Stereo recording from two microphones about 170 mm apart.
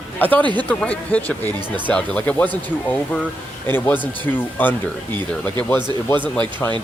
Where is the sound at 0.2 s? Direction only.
10° left (ahead or behind).